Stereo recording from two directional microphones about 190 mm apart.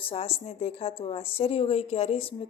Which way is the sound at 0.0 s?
30° left (ahead or behind).